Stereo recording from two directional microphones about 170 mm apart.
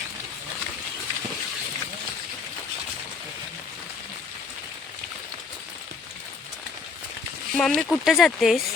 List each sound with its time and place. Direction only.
7.5 s speech: 5° left (ahead or behind)